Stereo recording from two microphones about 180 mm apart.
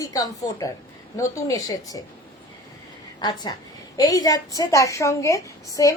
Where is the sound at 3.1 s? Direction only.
25° left (ahead or behind).